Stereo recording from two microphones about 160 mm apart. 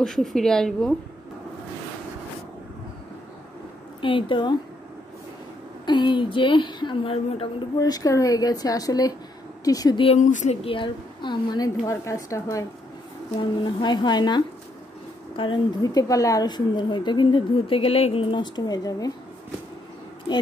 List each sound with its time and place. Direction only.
0.0 s a woman's voice: centre (ahead or behind)
4.0 s a woman's voice: 30° left (ahead or behind)
5.9 s a woman's voice: 30° left (ahead or behind)
10.0 s a woman's voice: 45° left (ahead or behind); by 19.1 s 25° left (ahead or behind)